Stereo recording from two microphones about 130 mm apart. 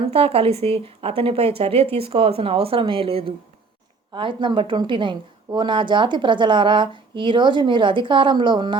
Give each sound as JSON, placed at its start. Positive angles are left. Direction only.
{"t": 0.0, "sound": "a woman's voice", "side_deg": -45}